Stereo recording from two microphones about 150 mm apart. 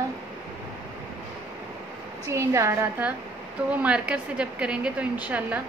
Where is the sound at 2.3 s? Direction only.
20° right (ahead or behind).